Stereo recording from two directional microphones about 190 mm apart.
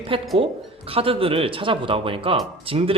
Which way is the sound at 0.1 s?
30° right (ahead or behind).